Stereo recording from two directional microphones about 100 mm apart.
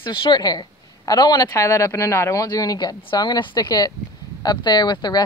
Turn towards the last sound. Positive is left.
turn(degrees=45)  # may be behind; listen again after turning